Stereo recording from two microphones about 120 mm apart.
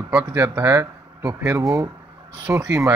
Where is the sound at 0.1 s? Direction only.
25° right (ahead or behind).